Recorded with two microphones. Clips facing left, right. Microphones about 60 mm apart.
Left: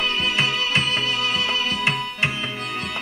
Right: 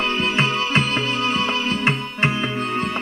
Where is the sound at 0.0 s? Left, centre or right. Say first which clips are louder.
Right 2 dB; right.